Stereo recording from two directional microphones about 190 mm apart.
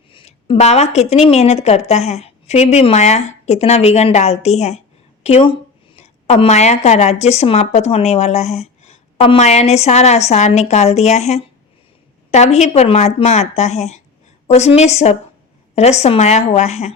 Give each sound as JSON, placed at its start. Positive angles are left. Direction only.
{"t": 0.1, "sound": "a woman's voice", "side_deg": 30}